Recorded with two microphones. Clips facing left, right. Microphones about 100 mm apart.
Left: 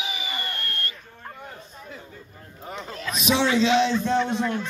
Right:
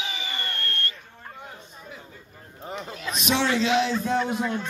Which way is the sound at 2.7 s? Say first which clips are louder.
Left 1 dB; 5° right (ahead or behind).